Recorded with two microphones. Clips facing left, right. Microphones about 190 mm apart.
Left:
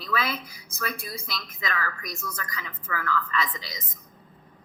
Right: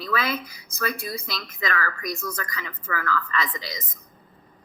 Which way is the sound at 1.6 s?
70° right (ahead or behind).